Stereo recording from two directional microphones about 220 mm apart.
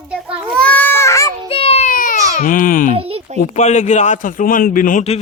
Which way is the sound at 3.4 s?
35° left (ahead or behind).